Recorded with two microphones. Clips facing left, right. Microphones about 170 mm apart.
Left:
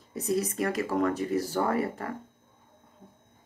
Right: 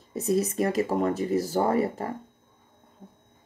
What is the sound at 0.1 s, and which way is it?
Speech, 25° right (ahead or behind).